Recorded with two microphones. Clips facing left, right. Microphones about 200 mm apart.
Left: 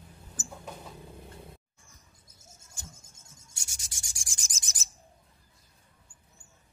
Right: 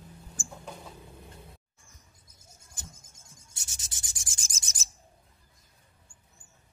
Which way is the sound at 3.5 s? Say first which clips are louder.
Right 1 dB; 20° right (ahead or behind).